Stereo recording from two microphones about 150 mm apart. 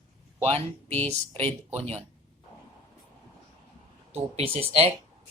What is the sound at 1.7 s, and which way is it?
Speech, 45° right (ahead or behind).